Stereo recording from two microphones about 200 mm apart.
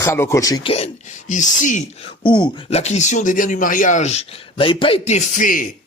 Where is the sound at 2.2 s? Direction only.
25° left (ahead or behind); by 5.6 s 40° left (ahead or behind).